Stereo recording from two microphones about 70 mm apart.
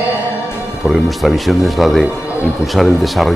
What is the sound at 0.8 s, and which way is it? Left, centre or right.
Speech, centre.